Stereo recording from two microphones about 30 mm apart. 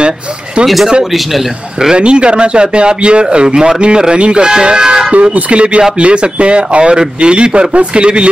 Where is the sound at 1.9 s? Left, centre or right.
Right.